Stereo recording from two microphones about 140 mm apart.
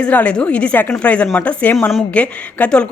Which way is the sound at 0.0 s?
10° left (ahead or behind).